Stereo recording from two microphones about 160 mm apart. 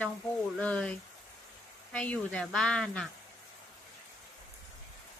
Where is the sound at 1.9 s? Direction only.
10° left (ahead or behind).